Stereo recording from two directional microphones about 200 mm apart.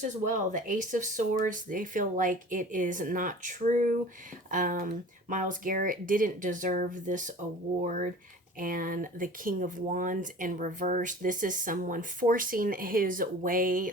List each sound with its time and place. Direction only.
0.0 s speech: 35° right (ahead or behind)